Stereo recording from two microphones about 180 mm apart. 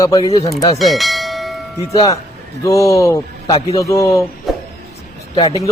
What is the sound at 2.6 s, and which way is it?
Speech, 15° left (ahead or behind).